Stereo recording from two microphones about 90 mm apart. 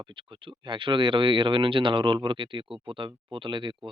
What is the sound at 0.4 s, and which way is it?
Speech, 65° right (ahead or behind).